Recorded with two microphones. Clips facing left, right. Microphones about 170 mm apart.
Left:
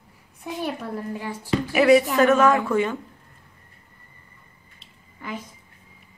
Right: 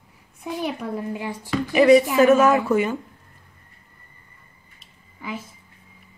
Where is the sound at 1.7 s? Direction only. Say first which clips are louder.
Right 2 dB; 5° left (ahead or behind).